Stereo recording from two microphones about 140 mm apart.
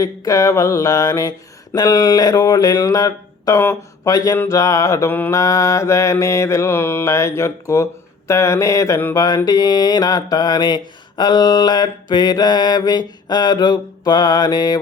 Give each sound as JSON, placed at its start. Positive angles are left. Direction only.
{"t": 0.0, "sound": "mantra", "side_deg": 25}